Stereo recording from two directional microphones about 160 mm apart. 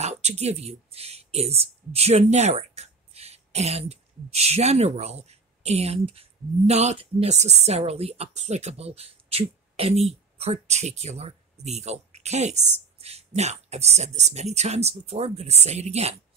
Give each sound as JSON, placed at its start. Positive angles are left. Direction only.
{"t": 0.0, "sound": "a woman's voice", "side_deg": -45}